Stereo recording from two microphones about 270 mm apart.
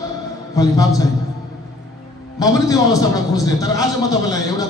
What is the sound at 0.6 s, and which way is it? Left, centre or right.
Speech, centre.